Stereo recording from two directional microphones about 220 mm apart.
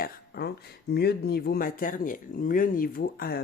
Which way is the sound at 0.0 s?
45° left (ahead or behind).